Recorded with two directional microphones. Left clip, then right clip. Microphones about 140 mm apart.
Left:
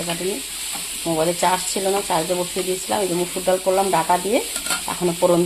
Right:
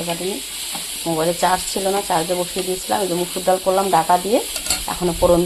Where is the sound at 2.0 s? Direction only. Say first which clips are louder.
Right 2 dB; centre (ahead or behind).